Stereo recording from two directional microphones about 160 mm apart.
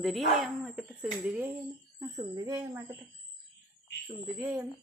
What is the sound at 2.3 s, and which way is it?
Speech, 25° right (ahead or behind).